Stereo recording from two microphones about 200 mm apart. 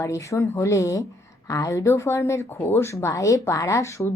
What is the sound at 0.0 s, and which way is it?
Speech, 15° left (ahead or behind).